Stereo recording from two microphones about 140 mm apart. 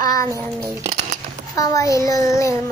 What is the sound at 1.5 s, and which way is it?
Child singing, 25° left (ahead or behind).